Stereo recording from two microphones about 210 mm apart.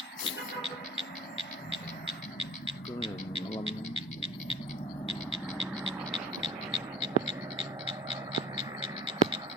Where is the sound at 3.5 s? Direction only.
25° left (ahead or behind).